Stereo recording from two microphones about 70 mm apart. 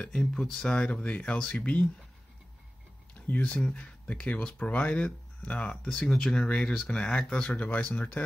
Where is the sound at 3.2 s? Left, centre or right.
Centre.